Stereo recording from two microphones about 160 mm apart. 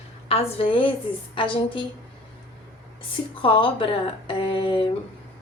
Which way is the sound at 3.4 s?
30° left (ahead or behind).